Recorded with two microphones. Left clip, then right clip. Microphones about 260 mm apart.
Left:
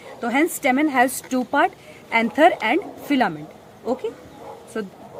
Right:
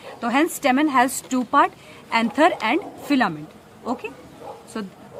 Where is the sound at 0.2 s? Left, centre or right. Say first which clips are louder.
Even; centre.